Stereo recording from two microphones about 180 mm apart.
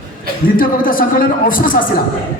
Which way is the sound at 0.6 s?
50° left (ahead or behind).